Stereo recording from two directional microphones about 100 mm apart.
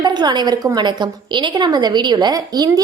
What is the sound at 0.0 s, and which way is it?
A woman's voice, 45° right (ahead or behind).